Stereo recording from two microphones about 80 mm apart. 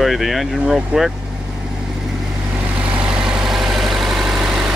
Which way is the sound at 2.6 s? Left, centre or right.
Centre.